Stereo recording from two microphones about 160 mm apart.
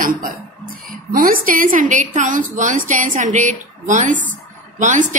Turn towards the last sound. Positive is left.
turn(degrees=-50)  # may be behind; listen again after turning